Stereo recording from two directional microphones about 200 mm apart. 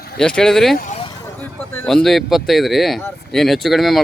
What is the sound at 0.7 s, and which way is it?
Speech, 40° left (ahead or behind).